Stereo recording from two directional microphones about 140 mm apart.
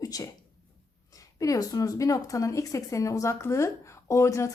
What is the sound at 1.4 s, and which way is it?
A woman's voice, 25° left (ahead or behind).